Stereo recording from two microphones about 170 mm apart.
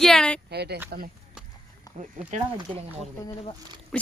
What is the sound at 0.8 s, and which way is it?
Speech, 60° right (ahead or behind).